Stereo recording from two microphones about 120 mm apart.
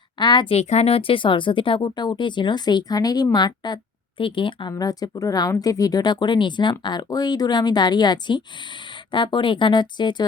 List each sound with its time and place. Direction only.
0.2 s speech: 40° left (ahead or behind)
0.5 s speech: 65° left (ahead or behind); by 4.7 s 45° left (ahead or behind)
4.7 s speech: 30° left (ahead or behind)